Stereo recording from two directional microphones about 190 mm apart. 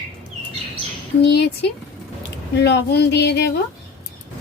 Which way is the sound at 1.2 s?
60° left (ahead or behind).